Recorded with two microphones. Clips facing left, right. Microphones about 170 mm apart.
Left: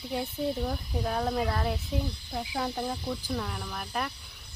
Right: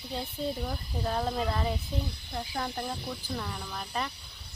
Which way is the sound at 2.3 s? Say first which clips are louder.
Left 2 dB; 10° left (ahead or behind).